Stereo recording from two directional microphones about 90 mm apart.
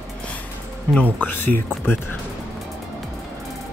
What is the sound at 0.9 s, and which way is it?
Speech, 15° left (ahead or behind).